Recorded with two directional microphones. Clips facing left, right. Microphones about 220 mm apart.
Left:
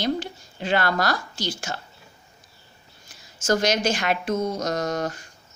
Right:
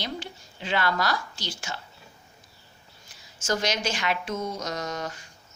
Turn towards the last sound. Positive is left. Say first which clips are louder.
# left 7 dB
turn(degrees=45)  # may be behind; listen again after turning